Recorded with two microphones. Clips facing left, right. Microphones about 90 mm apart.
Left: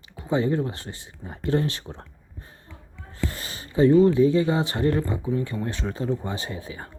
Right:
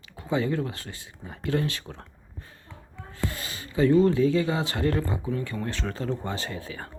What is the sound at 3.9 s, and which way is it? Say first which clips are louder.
Speech: left 3 dB; 20° left (ahead or behind).